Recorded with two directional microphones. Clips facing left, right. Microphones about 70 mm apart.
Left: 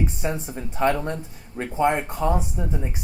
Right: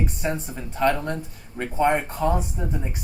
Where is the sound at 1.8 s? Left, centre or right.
Right.